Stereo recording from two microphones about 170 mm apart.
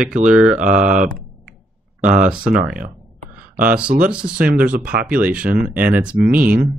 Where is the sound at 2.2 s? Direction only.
5° right (ahead or behind).